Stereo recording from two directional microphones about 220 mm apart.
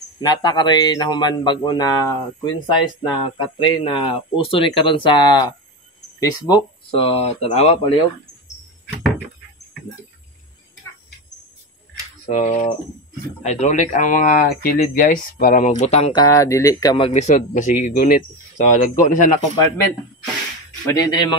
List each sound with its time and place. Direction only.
0.2 s speech: 20° left (ahead or behind)
12.3 s speech: 35° left (ahead or behind)
15.7 s speech: 30° left (ahead or behind)
21.1 s speech: 20° left (ahead or behind)